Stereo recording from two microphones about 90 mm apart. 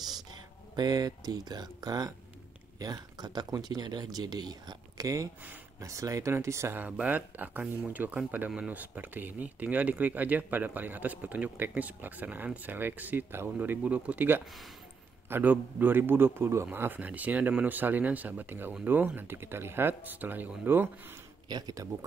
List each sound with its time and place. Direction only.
0.1 s speech: 50° right (ahead or behind); by 6.8 s 30° right (ahead or behind)
6.8 s speech: 15° right (ahead or behind)
14.4 s speech: centre (ahead or behind)
15.2 s speech: 20° right (ahead or behind)
21.5 s speech: 50° right (ahead or behind)